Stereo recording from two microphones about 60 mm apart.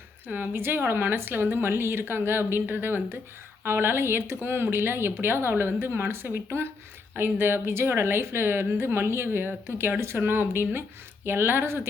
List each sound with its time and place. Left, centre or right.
0.3 s speech: right